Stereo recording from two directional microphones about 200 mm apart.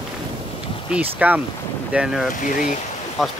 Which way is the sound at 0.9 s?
5° right (ahead or behind).